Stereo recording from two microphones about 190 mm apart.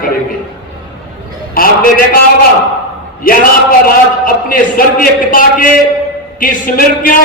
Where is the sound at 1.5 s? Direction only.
50° left (ahead or behind).